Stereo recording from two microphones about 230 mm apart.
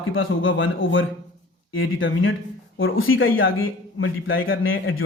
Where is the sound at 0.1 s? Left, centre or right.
Left.